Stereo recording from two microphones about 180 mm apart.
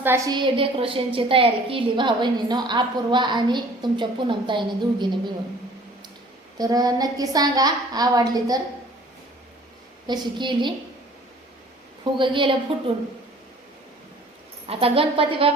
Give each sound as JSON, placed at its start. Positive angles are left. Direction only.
{"t": 0.0, "sound": "a woman's voice", "side_deg": -15}
{"t": 0.3, "sound": "a woman's voice", "side_deg": -30}
{"t": 6.6, "sound": "a woman's voice", "side_deg": -20}
{"t": 10.1, "sound": "a woman's voice", "side_deg": -25}
{"t": 12.1, "sound": "a woman's voice", "side_deg": -25}
{"t": 14.7, "sound": "a woman's voice", "side_deg": -30}